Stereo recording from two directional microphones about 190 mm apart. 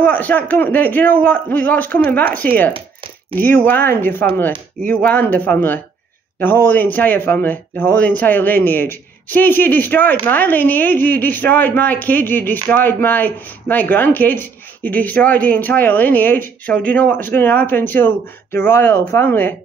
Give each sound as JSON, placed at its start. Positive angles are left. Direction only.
{"t": 0.0, "sound": "a woman's voice", "side_deg": 10}